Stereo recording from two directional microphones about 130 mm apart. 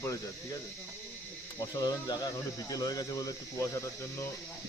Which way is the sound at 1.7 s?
30° left (ahead or behind).